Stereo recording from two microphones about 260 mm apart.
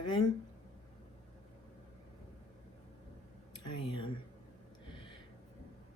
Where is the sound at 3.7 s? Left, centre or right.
Centre.